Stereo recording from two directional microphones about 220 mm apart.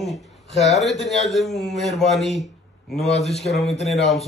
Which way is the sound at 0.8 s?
Centre (ahead or behind).